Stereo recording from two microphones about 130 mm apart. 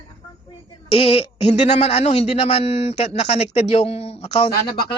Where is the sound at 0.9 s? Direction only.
45° left (ahead or behind).